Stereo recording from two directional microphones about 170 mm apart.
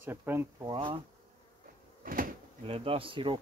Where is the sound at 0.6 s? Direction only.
25° right (ahead or behind).